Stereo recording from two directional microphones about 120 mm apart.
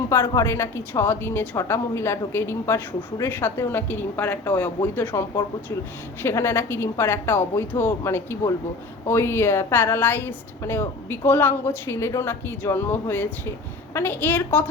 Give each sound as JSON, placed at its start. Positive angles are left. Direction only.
{"t": 0.1, "sound": "a woman's voice", "side_deg": 25}
{"t": 6.2, "sound": "a woman's voice", "side_deg": 20}